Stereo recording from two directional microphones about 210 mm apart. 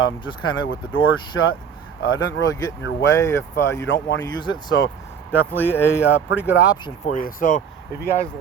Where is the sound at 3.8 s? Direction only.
55° left (ahead or behind).